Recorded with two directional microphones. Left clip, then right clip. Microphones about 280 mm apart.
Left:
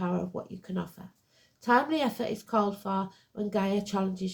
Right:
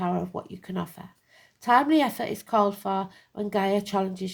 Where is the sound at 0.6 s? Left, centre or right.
Right.